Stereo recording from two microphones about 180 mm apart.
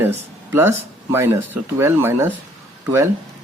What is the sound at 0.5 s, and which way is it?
Speech, 15° right (ahead or behind).